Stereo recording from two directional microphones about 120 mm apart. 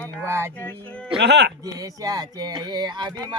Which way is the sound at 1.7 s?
30° right (ahead or behind).